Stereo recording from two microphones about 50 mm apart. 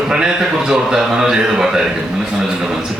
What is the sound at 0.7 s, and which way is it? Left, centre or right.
A man's voice, centre.